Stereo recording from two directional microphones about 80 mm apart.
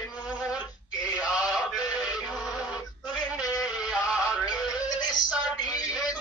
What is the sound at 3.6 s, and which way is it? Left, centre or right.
Music, centre.